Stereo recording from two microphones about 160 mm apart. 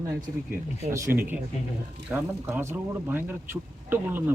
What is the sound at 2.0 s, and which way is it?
A man's voice, 15° right (ahead or behind).